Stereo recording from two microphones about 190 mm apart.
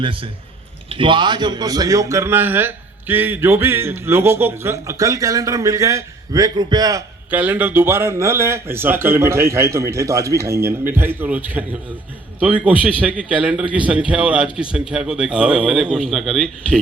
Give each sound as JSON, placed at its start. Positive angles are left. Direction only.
{"t": 0.0, "sound": "a man's voice", "side_deg": -30}
{"t": 7.3, "sound": "a man's voice", "side_deg": -10}